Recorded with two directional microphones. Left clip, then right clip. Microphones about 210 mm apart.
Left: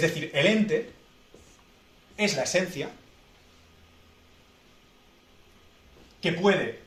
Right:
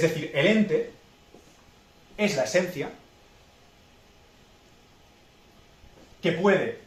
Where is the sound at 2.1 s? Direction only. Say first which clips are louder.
Right 1 dB; 40° left (ahead or behind).